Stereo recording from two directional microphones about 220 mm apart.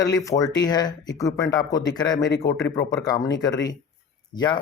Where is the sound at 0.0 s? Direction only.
15° left (ahead or behind).